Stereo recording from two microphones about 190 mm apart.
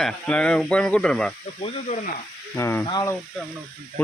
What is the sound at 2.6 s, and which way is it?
Speech, 15° left (ahead or behind).